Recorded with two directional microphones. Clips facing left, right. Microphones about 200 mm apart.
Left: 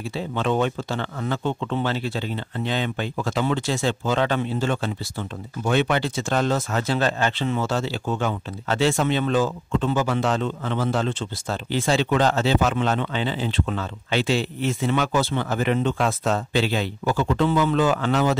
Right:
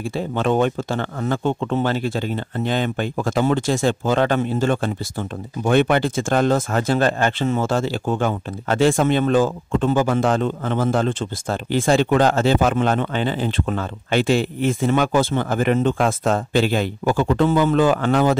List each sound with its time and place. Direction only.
0.1 s speech: 50° right (ahead or behind)